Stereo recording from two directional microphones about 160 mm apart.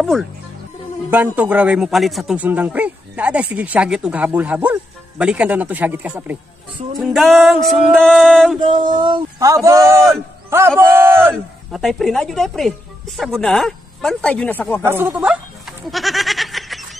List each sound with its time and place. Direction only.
0.0 s a woman's voice: centre (ahead or behind)
1.1 s a man's voice: 10° right (ahead or behind)
8.5 s a man's voice: 30° right (ahead or behind); by 11.3 s 15° right (ahead or behind)
11.3 s a woman's voice: centre (ahead or behind)
14.8 s goat: 15° right (ahead or behind)